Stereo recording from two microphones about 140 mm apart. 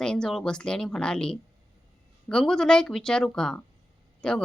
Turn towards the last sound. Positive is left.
turn(degrees=5)  # may be behind; listen again after turning